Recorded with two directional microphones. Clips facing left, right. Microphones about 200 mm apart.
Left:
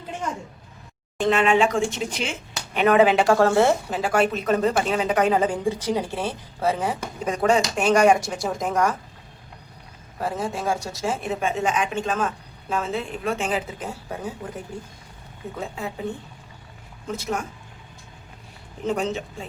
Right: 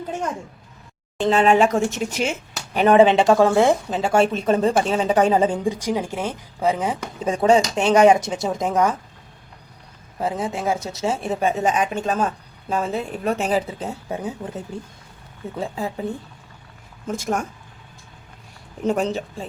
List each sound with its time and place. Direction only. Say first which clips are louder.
1.2 s speech: right 3 dB; 35° right (ahead or behind)
2.7 s speech: right 3 dB; 30° right (ahead or behind)
5.6 s speech: right 1 dB; 10° right (ahead or behind)
7.3 s speech: right 4 dB; 25° right (ahead or behind)
10.2 s speech: right 2 dB; 20° right (ahead or behind); by 13.8 s 35° right (ahead or behind)
13.8 s speech: right 4 dB; 20° right (ahead or behind)
17.1 s speech: right 3 dB; 45° right (ahead or behind)
18.9 s speech: right 3 dB; 40° right (ahead or behind)